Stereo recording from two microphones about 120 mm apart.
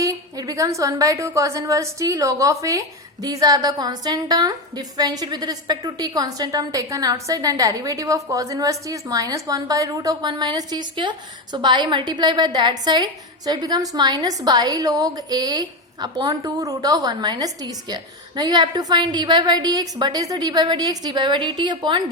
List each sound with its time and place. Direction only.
0.0 s a woman's voice: 30° right (ahead or behind)